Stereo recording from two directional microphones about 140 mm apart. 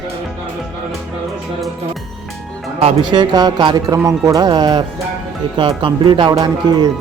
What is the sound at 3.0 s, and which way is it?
Speech, 30° right (ahead or behind).